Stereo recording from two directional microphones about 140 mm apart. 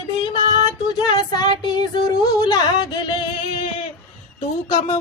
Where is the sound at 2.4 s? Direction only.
30° left (ahead or behind).